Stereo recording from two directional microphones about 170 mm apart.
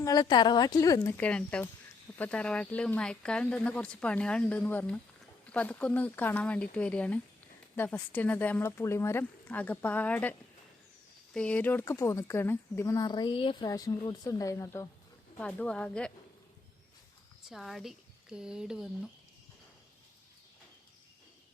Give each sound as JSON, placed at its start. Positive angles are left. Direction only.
{"t": 0.0, "sound": "speech", "side_deg": 20}
{"t": 11.3, "sound": "speech", "side_deg": 5}
{"t": 15.4, "sound": "speech", "side_deg": 5}
{"t": 17.5, "sound": "speech", "side_deg": 0}